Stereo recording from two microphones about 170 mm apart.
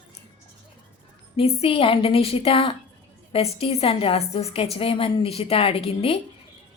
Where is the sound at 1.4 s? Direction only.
35° left (ahead or behind).